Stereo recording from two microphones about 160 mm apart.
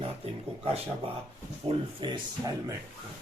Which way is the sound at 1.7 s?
30° right (ahead or behind).